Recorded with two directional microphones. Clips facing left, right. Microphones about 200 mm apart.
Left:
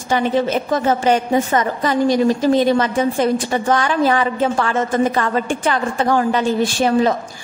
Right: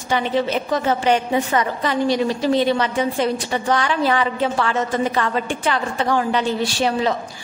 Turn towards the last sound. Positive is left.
turn(degrees=45)  # may be behind; listen again after turning